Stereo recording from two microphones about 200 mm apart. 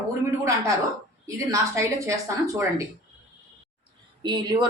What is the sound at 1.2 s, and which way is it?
Speech, 15° right (ahead or behind).